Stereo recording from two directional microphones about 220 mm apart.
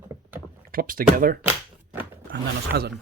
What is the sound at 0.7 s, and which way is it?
Speech, 40° right (ahead or behind).